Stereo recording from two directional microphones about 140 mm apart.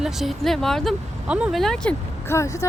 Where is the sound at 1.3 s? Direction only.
10° right (ahead or behind).